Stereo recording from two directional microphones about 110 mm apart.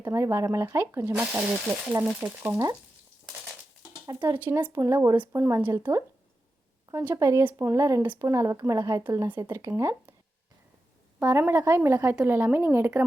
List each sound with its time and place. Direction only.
0.0 s speech: 25° right (ahead or behind)
1.1 s speech: 15° right (ahead or behind)
2.2 s speech: 25° right (ahead or behind)
4.4 s speech: 15° right (ahead or behind)
11.2 s speech: 20° right (ahead or behind)